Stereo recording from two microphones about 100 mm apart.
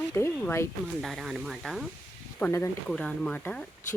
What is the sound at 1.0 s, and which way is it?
Speech, 5° right (ahead or behind).